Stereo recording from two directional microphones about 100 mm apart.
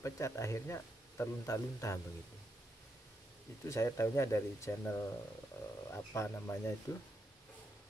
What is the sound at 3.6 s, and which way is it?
Speech, 30° left (ahead or behind).